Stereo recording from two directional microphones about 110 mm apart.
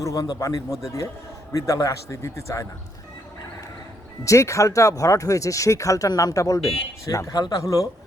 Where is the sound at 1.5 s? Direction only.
30° left (ahead or behind).